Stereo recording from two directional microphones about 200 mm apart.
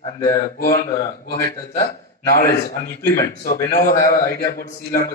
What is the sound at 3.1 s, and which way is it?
A man's voice, 45° left (ahead or behind).